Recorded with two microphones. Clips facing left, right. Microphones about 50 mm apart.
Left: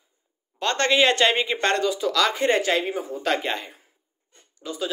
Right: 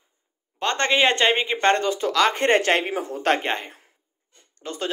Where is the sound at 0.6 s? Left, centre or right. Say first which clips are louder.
Even; right.